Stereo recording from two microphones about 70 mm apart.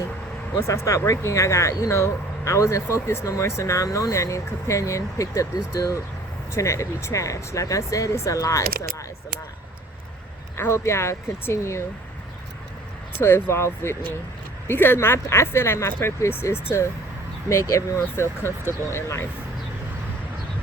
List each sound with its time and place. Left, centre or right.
0.6 s speech: left
10.6 s speech: left
13.1 s speech: left